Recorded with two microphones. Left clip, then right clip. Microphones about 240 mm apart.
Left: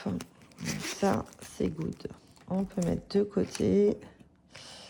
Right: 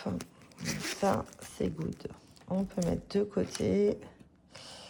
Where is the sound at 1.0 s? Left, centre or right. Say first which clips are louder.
Left 1 dB; left.